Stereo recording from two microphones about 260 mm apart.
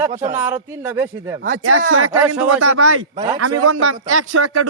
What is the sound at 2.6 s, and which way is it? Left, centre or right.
A man's voice, right.